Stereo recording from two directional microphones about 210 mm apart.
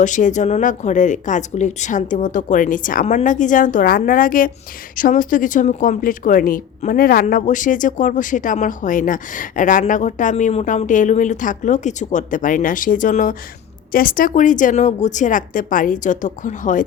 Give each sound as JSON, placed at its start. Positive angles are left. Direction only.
{"t": 0.0, "sound": "speech", "side_deg": 35}